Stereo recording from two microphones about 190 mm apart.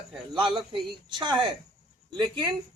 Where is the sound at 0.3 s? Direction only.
25° right (ahead or behind).